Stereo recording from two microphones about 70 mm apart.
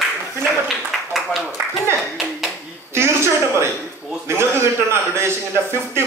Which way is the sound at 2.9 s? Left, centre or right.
Right.